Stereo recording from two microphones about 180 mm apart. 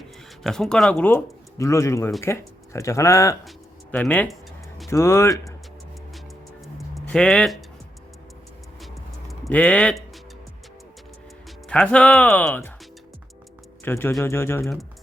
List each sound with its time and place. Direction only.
0.4 s speech: centre (ahead or behind)
4.9 s speech: 15° left (ahead or behind)
6.7 s a sound: 5° left (ahead or behind)
8.8 s music: centre (ahead or behind)
11.7 s speech: 5° left (ahead or behind)
13.8 s speech: 15° left (ahead or behind)